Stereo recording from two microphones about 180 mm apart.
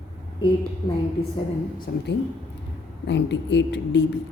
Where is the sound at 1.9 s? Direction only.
55° left (ahead or behind).